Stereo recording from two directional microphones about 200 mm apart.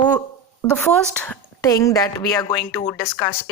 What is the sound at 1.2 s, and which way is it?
A woman's voice, 10° left (ahead or behind).